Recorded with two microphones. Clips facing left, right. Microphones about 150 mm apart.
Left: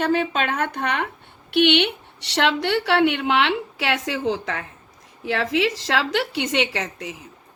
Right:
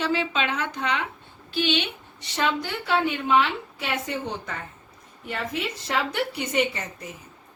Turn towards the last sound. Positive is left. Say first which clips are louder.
# left 6 dB
turn(degrees=90)